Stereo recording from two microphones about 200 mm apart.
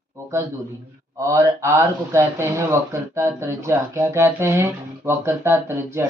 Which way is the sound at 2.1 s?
15° right (ahead or behind).